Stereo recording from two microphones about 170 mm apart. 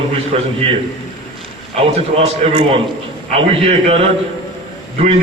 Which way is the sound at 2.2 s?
35° right (ahead or behind).